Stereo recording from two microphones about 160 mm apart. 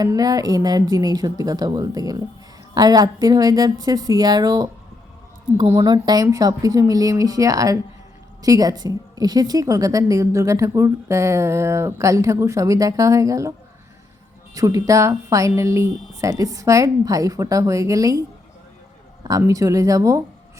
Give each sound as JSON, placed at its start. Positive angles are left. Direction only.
{"t": 0.0, "sound": "a woman's voice", "side_deg": -20}
{"t": 14.5, "sound": "a woman's voice", "side_deg": -20}
{"t": 19.2, "sound": "a woman's voice", "side_deg": -20}